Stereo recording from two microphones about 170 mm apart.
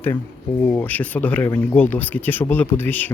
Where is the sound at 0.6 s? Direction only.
15° left (ahead or behind).